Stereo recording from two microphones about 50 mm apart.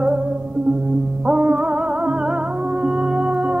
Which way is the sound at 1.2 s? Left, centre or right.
Centre.